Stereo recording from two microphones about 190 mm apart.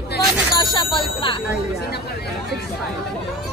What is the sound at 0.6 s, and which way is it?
Speech, 25° left (ahead or behind).